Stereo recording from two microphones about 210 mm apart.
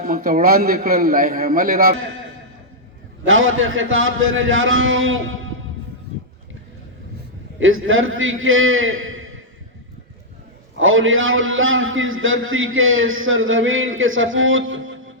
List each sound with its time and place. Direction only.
0.0 s a man's voice: 45° right (ahead or behind)
3.2 s a man's voice: 70° right (ahead or behind)
7.6 s a man's voice: 70° right (ahead or behind)
10.8 s a man's voice: 70° right (ahead or behind)